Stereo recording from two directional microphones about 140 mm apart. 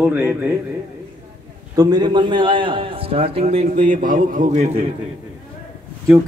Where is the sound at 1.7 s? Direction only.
25° right (ahead or behind); by 4.8 s 55° right (ahead or behind).